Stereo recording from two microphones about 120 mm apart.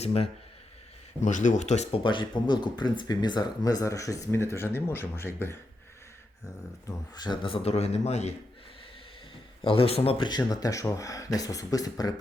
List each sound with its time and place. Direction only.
0.0 s speech: 55° left (ahead or behind)
1.2 s speech: 90° left; by 2.0 s 65° left (ahead or behind)
2.0 s speech: 40° left (ahead or behind); by 5.5 s 20° left (ahead or behind)
6.4 s speech: 30° left (ahead or behind); by 8.3 s 65° left (ahead or behind)
9.6 s speech: 55° left (ahead or behind)
10.2 s speech: 35° left (ahead or behind)